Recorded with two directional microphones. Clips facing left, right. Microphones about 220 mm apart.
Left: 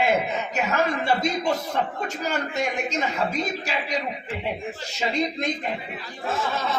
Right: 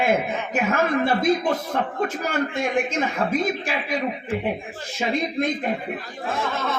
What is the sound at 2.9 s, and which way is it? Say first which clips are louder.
A man's voice: right 3 dB; 50° right (ahead or behind).